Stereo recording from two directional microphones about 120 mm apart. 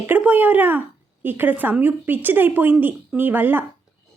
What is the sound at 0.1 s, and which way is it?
A woman's voice, 15° right (ahead or behind).